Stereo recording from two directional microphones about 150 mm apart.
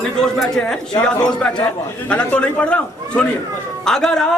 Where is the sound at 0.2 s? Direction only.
5° left (ahead or behind).